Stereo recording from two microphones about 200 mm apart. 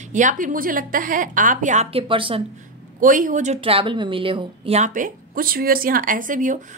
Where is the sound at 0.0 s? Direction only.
40° right (ahead or behind).